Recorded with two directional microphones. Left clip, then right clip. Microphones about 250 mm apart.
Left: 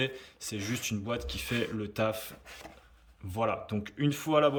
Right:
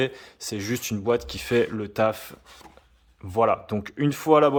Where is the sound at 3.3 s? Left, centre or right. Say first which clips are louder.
Right 10 dB; centre.